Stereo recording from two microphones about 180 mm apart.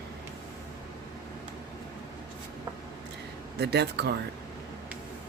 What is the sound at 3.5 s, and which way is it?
Speech, 70° right (ahead or behind).